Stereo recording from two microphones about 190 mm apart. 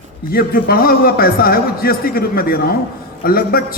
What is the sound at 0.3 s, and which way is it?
A man's voice, 50° left (ahead or behind).